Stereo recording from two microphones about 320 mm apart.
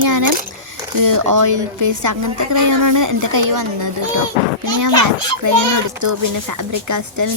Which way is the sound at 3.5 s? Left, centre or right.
Right.